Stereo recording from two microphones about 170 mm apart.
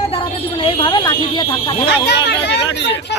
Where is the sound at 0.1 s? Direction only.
30° left (ahead or behind).